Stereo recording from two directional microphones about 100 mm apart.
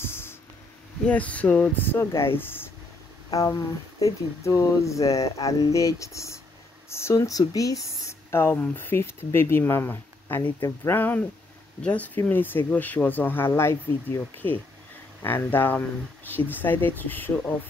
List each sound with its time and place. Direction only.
0.0 s a sound: 25° left (ahead or behind)
1.0 s speech: 15° left (ahead or behind)
3.3 s speech: 35° left (ahead or behind); by 17.3 s 20° left (ahead or behind)